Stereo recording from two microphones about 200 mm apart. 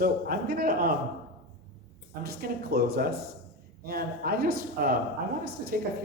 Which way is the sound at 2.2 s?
50° right (ahead or behind).